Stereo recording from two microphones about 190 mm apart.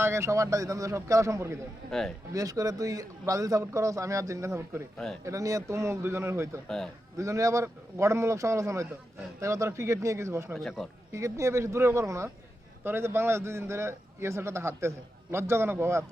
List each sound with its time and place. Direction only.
0.0 s a man's voice: 15° right (ahead or behind)
1.9 s a man's voice: centre (ahead or behind)
2.3 s a man's voice: 20° right (ahead or behind)
10.5 s a man's voice: centre (ahead or behind)
11.1 s a man's voice: 15° right (ahead or behind)